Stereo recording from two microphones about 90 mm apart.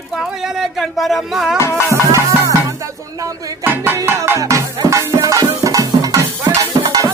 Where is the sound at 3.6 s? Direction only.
25° right (ahead or behind); by 7.0 s 40° right (ahead or behind).